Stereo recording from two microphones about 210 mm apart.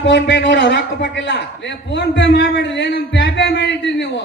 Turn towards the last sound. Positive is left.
turn(degrees=55)  # may be behind; listen again after turning